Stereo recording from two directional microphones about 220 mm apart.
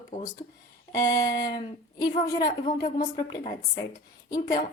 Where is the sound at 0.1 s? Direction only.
15° left (ahead or behind).